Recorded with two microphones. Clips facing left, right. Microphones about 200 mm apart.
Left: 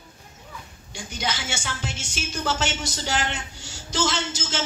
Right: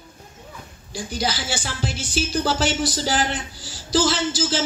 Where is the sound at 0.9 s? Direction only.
35° right (ahead or behind).